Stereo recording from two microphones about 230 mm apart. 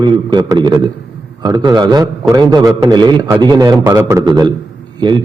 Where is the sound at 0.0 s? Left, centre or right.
Centre.